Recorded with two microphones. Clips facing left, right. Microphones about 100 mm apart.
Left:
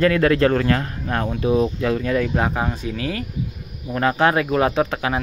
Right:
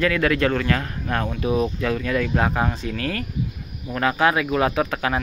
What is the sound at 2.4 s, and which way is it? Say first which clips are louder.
Speech: even; 10° left (ahead or behind).